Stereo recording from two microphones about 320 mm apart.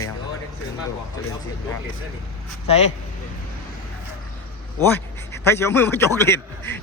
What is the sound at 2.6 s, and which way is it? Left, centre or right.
Speech, centre.